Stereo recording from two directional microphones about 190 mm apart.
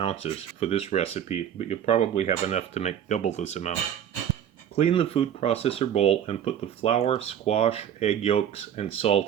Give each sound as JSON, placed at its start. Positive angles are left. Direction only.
{"t": 0.0, "sound": "speech", "side_deg": 30}